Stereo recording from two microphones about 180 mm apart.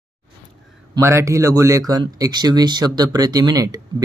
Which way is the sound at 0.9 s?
15° right (ahead or behind).